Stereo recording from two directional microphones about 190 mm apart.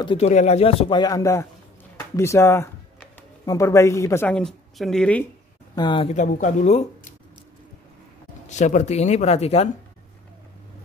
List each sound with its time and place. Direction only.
0.0 s speech: 25° left (ahead or behind)
0.3 s speech: 35° left (ahead or behind); by 5.2 s 5° left (ahead or behind)
5.8 s speech: 25° left (ahead or behind)
6.1 s speech: 40° left (ahead or behind)
8.5 s speech: 40° left (ahead or behind)